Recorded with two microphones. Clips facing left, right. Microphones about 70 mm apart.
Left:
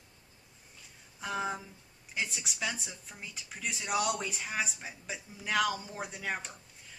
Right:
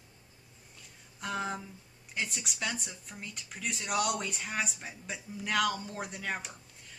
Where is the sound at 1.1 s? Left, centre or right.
Centre.